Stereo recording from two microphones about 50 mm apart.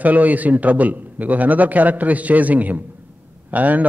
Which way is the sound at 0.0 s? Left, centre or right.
Right.